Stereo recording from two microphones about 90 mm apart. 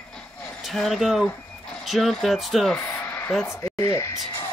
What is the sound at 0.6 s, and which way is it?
Speech, centre (ahead or behind).